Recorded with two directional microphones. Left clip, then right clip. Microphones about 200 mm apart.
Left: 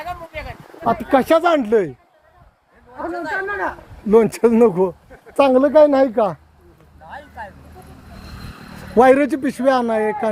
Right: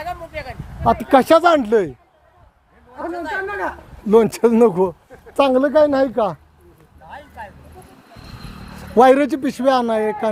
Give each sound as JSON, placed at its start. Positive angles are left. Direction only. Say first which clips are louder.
{"t": 0.0, "sound": "a sound", "louder": "right 1 dB", "side_deg": -55}
{"t": 0.9, "sound": "speech", "louder": "right 2 dB", "side_deg": -30}
{"t": 2.9, "sound": "speech", "louder": "left 1 dB", "side_deg": -10}
{"t": 5.4, "sound": "speech", "louder": "left 2 dB", "side_deg": 10}
{"t": 7.1, "sound": "a sound", "louder": "left 1 dB", "side_deg": -10}
{"t": 8.1, "sound": "vehicle", "louder": "even", "side_deg": 60}
{"t": 9.0, "sound": "a man's voice", "louder": "even", "side_deg": 0}